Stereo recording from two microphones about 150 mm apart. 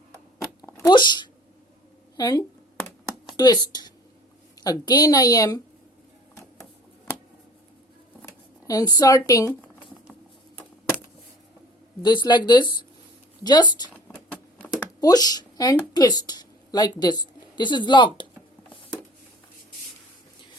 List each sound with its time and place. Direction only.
0.6 s a sound: 25° left (ahead or behind)
2.1 s a woman's voice: 25° left (ahead or behind)
8.2 s speech: 25° left (ahead or behind)
12.0 s a woman's voice: 30° left (ahead or behind)
14.6 s a sound: 10° left (ahead or behind)
15.0 s speech: 25° left (ahead or behind)